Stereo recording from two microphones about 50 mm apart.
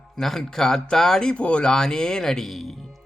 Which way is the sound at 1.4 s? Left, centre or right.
Left.